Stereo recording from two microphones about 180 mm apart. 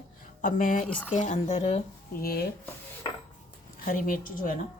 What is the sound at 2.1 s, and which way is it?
Speech, 60° left (ahead or behind).